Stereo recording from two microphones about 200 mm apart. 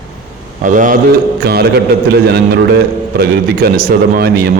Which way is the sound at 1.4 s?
55° right (ahead or behind).